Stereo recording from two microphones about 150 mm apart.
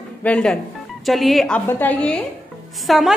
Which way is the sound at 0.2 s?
5° left (ahead or behind).